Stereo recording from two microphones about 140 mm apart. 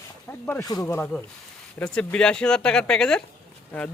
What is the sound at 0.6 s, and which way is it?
Speech, 25° left (ahead or behind).